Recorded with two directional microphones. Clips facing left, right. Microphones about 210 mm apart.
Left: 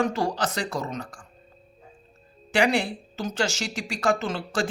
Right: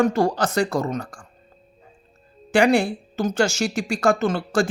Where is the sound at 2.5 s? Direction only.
45° right (ahead or behind).